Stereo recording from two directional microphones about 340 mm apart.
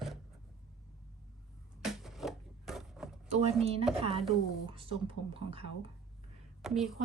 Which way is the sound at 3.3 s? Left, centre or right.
Centre.